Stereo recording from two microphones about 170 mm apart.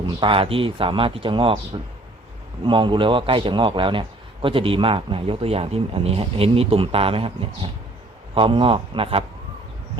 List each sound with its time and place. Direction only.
0.2 s a man's voice: 30° right (ahead or behind)